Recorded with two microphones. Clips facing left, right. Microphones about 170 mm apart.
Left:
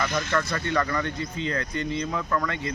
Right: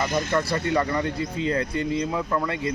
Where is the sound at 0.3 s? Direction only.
25° right (ahead or behind).